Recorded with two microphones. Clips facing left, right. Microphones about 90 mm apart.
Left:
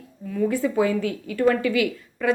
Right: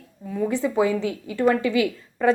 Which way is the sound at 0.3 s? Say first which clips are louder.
Even; 20° right (ahead or behind).